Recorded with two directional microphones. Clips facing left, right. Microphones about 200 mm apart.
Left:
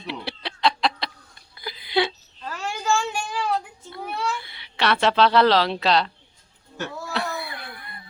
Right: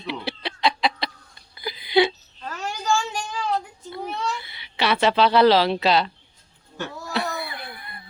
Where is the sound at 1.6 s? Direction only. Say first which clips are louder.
Right 4 dB; centre (ahead or behind).